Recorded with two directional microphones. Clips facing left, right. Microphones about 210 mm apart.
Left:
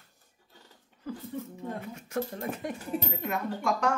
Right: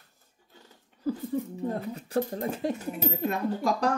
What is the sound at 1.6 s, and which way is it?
A woman's voice, 35° right (ahead or behind).